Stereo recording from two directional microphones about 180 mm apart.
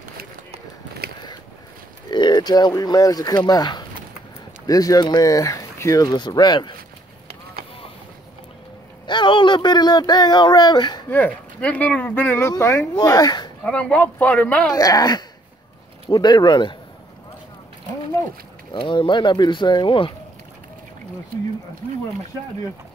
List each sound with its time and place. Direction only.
2.0 s speech: 25° left (ahead or behind)
9.0 s speech: 25° left (ahead or behind)
11.1 s speech: 10° left (ahead or behind)
13.7 s speech: 5° left (ahead or behind)
14.7 s speech: 20° left (ahead or behind)
18.7 s speech: 25° left (ahead or behind)